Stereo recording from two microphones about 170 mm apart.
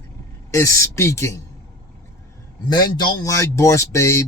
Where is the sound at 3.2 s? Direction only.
15° left (ahead or behind).